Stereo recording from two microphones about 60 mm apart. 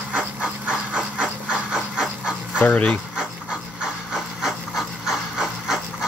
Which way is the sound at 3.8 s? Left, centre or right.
Centre.